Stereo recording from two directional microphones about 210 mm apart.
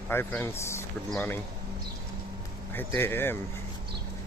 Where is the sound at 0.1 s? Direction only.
10° left (ahead or behind).